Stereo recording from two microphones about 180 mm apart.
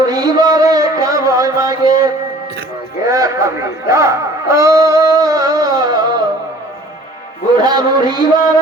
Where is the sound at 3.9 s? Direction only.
15° right (ahead or behind).